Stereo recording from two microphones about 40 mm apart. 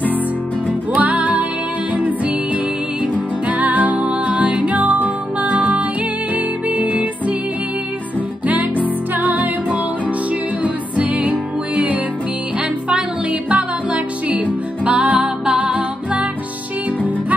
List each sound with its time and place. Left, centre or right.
0.9 s music: right
3.4 s music: right
9.1 s music: right
13.3 s music: right